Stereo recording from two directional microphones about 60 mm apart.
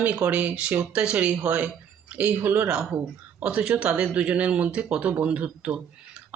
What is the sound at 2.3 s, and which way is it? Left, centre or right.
Speech, right.